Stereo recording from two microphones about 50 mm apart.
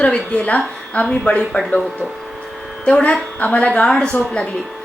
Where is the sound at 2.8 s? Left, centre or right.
Left.